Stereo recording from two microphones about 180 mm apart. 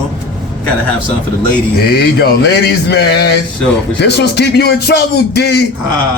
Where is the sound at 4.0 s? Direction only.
70° left (ahead or behind).